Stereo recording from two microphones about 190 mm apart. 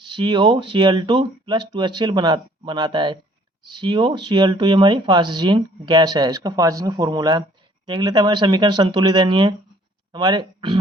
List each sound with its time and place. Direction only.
0.0 s speech: 25° right (ahead or behind)